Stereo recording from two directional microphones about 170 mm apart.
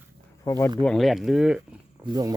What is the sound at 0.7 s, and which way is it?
Speech, 5° left (ahead or behind).